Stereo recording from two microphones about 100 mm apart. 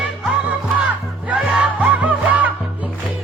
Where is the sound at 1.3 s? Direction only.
15° right (ahead or behind).